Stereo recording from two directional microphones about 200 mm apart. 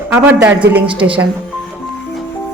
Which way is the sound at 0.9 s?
25° right (ahead or behind).